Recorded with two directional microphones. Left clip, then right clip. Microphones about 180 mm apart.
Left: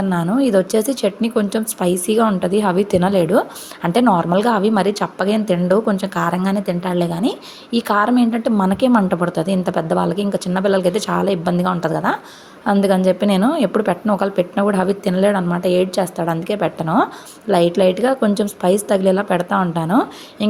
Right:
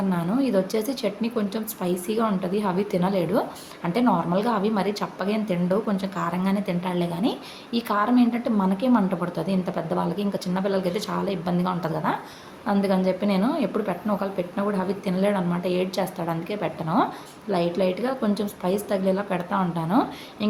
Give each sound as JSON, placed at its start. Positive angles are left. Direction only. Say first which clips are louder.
{"t": 0.1, "sound": "a woman's voice", "louder": "left 9 dB", "side_deg": 40}